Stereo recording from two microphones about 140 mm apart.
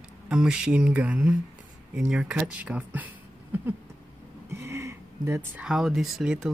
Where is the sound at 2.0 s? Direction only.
5° right (ahead or behind).